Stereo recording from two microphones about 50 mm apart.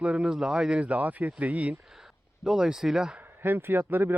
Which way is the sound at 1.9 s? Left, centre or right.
Centre.